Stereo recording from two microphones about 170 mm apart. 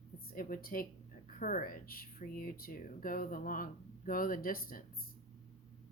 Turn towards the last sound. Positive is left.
turn(degrees=55)  # may be behind; listen again after turning